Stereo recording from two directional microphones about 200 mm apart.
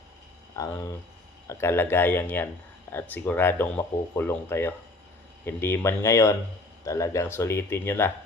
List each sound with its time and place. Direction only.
0.5 s speech: 15° left (ahead or behind)